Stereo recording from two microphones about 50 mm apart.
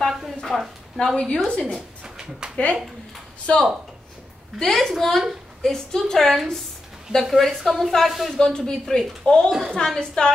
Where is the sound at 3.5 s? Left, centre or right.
Left.